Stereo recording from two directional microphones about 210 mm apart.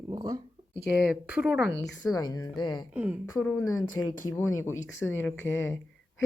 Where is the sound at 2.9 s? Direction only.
5° right (ahead or behind).